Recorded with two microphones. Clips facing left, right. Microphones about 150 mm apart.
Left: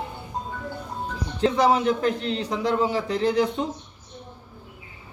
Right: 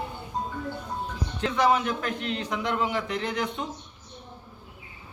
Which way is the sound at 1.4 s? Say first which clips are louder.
Left 4 dB; 30° left (ahead or behind).